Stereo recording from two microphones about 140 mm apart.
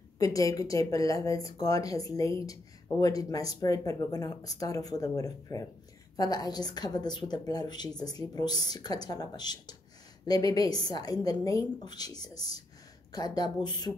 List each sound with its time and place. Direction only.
0.2 s speech: 25° left (ahead or behind)